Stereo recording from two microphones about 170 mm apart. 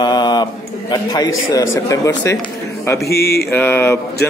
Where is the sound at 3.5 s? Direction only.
10° left (ahead or behind).